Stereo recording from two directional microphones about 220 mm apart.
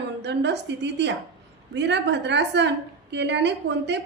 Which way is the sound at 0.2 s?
50° right (ahead or behind).